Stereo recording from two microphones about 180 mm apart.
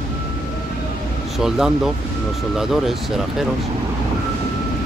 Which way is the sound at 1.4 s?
Centre (ahead or behind).